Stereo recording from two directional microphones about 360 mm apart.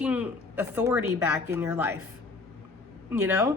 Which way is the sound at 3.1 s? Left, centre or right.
Centre.